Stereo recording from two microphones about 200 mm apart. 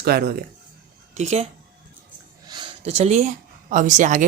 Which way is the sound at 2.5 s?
25° right (ahead or behind).